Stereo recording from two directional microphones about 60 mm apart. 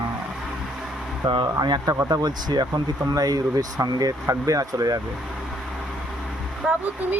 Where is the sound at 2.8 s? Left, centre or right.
Right.